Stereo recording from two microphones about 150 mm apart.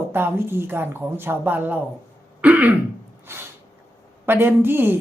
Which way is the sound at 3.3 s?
15° right (ahead or behind).